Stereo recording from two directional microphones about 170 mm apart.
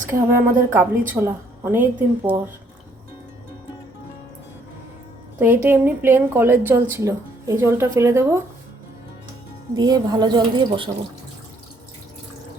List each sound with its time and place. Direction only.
0.1 s a woman's voice: 15° right (ahead or behind)
5.6 s a woman's voice: 10° right (ahead or behind)
9.7 s a woman's voice: 20° right (ahead or behind)